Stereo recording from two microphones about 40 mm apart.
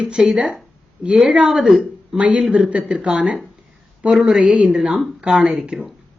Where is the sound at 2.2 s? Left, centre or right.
Right.